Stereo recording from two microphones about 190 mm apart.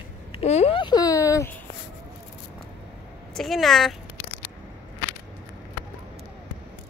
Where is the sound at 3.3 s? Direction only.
Centre (ahead or behind).